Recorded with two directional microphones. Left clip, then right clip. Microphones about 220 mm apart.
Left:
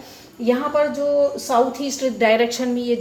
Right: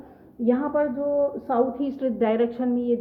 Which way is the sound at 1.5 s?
Centre (ahead or behind).